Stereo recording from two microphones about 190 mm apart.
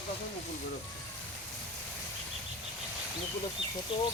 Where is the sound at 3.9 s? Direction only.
30° left (ahead or behind).